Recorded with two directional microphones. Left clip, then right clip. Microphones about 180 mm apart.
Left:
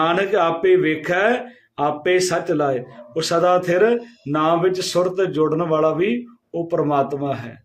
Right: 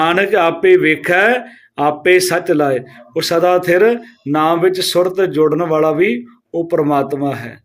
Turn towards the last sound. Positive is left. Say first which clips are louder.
# right 4 dB
turn(degrees=-25)  # may be behind; listen again after turning